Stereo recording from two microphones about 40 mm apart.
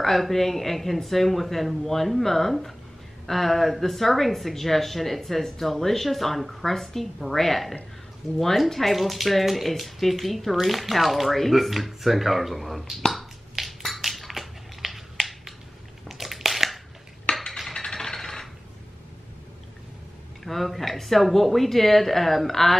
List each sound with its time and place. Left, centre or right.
0.0 s speech: centre
13.6 s finger snapping: centre
16.1 s crushing: centre
17.3 s cutlery: left
17.7 s a sound: centre
20.4 s speech: centre